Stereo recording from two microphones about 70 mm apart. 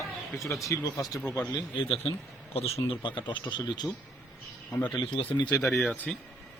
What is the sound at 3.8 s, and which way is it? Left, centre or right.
Speech, centre.